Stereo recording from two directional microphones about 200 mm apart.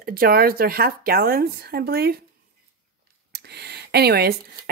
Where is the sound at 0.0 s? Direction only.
50° right (ahead or behind).